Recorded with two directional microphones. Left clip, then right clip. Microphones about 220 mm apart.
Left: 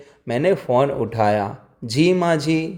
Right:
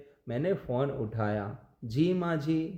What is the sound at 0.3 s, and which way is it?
Speech, 30° left (ahead or behind).